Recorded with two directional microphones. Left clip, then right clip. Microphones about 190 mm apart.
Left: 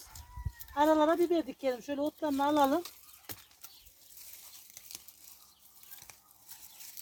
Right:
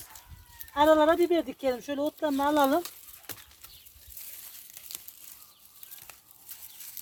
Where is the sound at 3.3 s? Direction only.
10° right (ahead or behind).